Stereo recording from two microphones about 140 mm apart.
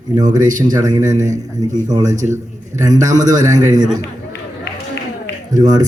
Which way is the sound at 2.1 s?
60° right (ahead or behind).